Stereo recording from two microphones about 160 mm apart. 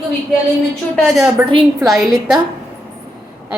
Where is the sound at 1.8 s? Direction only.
Centre (ahead or behind).